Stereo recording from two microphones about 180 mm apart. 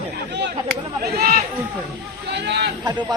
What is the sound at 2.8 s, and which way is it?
Speech, 20° right (ahead or behind).